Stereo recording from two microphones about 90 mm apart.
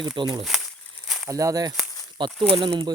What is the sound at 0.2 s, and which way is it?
Speech, 65° right (ahead or behind).